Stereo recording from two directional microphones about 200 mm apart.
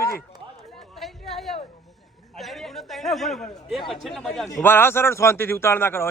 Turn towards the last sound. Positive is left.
turn(degrees=10)  # may be behind; listen again after turning